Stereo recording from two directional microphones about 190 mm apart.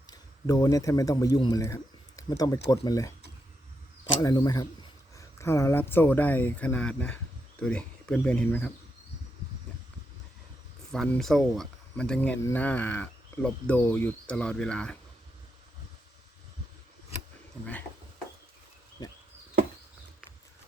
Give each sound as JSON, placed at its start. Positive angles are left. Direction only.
{"t": 0.1, "sound": "a man's voice", "side_deg": 20}
{"t": 4.2, "sound": "speech", "side_deg": 20}
{"t": 10.9, "sound": "speech", "side_deg": 5}